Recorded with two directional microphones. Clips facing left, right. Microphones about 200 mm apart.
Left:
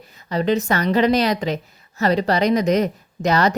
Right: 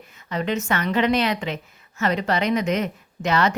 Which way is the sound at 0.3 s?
35° left (ahead or behind).